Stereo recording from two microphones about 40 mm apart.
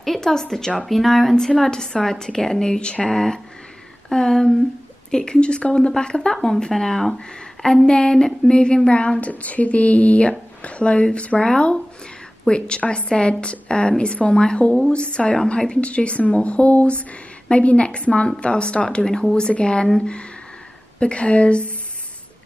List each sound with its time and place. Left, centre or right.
0.0 s a woman's voice: centre
0.8 s speech: centre
1.3 s a woman's voice: left
21.0 s a woman's voice: left